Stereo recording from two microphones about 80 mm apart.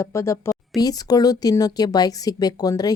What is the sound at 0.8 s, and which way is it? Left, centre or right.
Speech, left.